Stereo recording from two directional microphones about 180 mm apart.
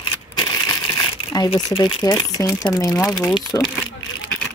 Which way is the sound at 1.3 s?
25° left (ahead or behind).